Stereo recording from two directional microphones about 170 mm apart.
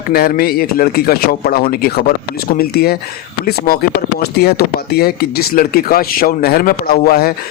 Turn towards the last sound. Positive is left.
turn(degrees=60)  # may be behind; listen again after turning